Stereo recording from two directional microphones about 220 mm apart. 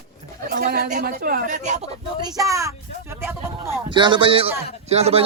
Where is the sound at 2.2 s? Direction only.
15° right (ahead or behind).